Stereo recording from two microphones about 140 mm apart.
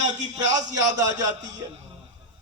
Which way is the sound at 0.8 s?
25° right (ahead or behind).